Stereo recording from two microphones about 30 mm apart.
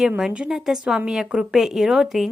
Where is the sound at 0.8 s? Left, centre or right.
Right.